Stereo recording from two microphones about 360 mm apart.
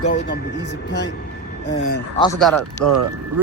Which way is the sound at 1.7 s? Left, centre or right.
Left.